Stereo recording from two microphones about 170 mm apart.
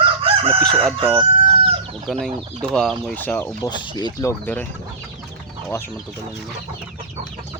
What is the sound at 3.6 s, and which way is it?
Speech, 25° left (ahead or behind).